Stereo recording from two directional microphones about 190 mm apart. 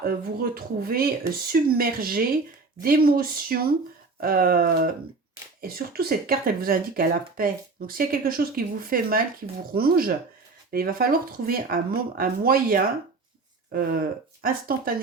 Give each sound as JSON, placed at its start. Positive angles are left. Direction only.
{"t": 0.0, "sound": "speech", "side_deg": -50}